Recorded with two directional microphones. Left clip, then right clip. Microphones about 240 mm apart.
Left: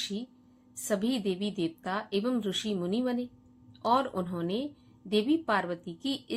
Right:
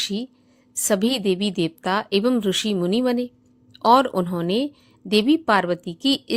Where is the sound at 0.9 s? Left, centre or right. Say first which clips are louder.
Right 10 dB; right.